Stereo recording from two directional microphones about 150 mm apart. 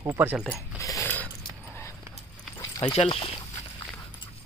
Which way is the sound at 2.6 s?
30° left (ahead or behind).